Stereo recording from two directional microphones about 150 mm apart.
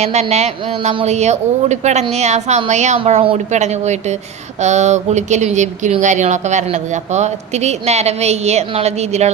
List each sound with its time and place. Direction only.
0.0 s speech: 50° right (ahead or behind)
3.0 s speech: 40° right (ahead or behind)